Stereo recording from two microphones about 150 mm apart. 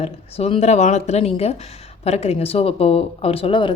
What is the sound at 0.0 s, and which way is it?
A woman's voice, 40° left (ahead or behind).